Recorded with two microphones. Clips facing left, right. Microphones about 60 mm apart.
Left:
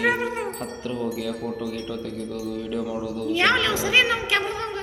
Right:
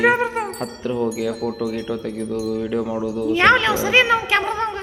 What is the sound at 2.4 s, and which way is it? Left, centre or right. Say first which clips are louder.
Speech: right 8 dB; right.